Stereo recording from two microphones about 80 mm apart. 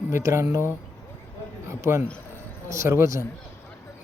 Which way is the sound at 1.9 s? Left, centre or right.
Right.